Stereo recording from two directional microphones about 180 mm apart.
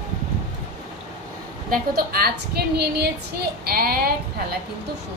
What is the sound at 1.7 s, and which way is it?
A woman's voice, 55° right (ahead or behind).